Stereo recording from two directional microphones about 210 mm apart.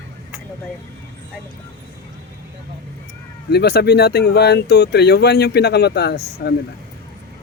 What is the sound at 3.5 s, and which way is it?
Speech, 50° left (ahead or behind).